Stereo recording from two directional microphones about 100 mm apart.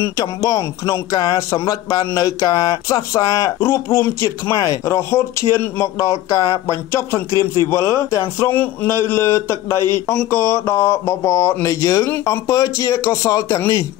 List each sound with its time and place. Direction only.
0.0 s speech: 35° left (ahead or behind)
1.5 s speech: 30° left (ahead or behind)
3.5 s speech: 25° left (ahead or behind)